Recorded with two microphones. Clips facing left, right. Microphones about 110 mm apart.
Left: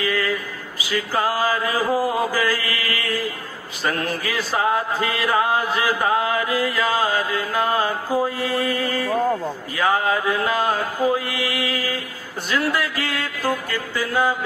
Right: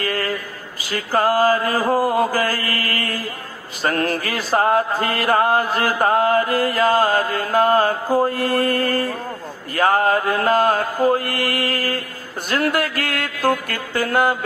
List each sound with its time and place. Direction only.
0.0 s mantra: 45° right (ahead or behind)